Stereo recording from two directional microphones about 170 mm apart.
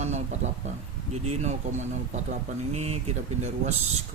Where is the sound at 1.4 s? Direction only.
45° right (ahead or behind).